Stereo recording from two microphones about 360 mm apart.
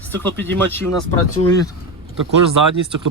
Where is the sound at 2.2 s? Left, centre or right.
Right.